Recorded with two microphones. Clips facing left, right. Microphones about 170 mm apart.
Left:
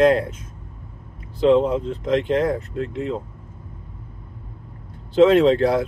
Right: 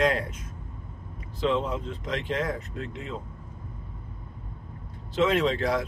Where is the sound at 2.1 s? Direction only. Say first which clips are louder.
Left 10 dB; 45° left (ahead or behind).